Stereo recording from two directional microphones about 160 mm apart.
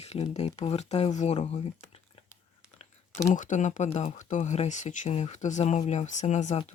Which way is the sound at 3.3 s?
50° left (ahead or behind).